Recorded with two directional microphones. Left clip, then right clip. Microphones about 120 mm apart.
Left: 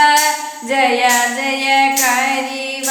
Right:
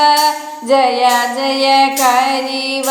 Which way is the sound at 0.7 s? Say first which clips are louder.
Right 2 dB; 40° right (ahead or behind).